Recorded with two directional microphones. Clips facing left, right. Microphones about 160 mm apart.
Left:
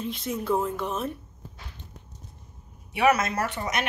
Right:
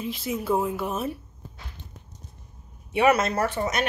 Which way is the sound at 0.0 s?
5° right (ahead or behind).